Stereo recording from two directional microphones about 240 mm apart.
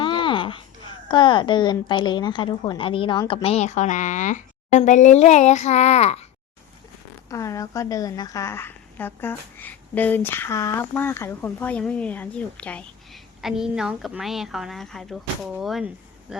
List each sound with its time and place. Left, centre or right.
0.0 s a sound: left
1.0 s a woman's voice: centre
7.3 s a woman's voice: centre